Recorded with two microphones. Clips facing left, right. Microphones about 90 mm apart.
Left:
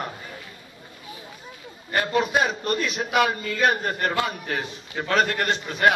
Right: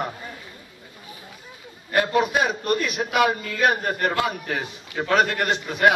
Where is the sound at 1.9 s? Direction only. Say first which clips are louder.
Right 2 dB; 10° right (ahead or behind).